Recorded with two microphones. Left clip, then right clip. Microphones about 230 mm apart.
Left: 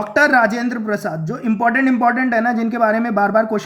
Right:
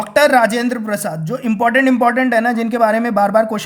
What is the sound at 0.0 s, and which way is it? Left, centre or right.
Speech, right.